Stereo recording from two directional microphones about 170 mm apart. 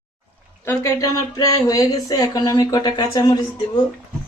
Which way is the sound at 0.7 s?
20° left (ahead or behind).